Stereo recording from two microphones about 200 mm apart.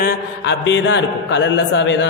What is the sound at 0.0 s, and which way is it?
A woman's voice, 65° left (ahead or behind).